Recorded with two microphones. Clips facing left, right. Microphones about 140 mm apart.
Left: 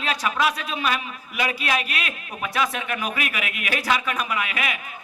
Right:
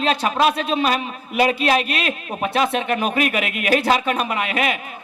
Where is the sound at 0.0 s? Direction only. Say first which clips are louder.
Right 5 dB; 30° right (ahead or behind).